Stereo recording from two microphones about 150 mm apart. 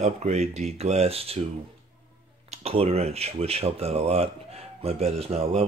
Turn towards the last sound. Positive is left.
turn(degrees=-45)  # may be behind; listen again after turning